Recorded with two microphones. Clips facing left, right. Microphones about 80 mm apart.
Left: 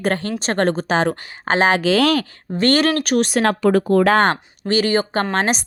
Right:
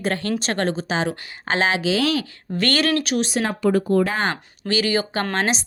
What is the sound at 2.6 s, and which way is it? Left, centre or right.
Speech, left.